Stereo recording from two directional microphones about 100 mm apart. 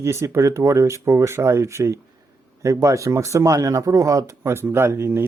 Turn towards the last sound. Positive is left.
turn(degrees=-25)  # may be behind; listen again after turning